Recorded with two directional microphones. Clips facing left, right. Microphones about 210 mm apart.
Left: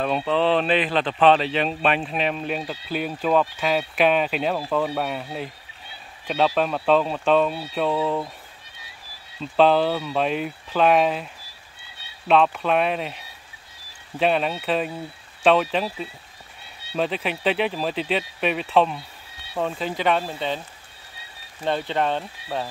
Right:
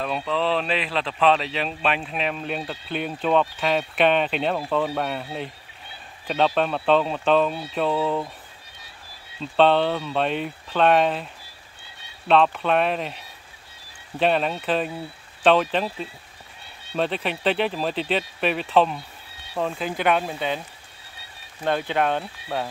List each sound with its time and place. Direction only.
0.0 s speech: 35° left (ahead or behind)
0.7 s speech: centre (ahead or behind)
9.6 s speech: centre (ahead or behind)
12.3 s speech: centre (ahead or behind)
21.6 s speech: 5° right (ahead or behind)